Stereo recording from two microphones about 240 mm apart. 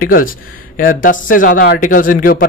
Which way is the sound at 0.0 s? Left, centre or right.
Left.